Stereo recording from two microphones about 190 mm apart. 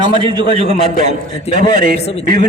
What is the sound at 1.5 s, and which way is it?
Speech, 45° right (ahead or behind).